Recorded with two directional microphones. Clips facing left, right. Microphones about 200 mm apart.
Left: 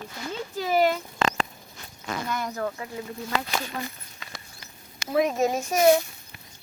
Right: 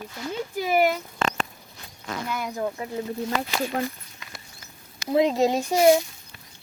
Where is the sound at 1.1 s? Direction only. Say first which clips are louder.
Left 1 dB; 90° left.